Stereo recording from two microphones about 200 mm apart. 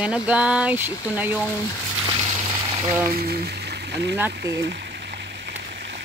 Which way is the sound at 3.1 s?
50° right (ahead or behind).